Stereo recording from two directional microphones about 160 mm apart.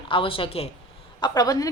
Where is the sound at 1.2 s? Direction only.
25° left (ahead or behind).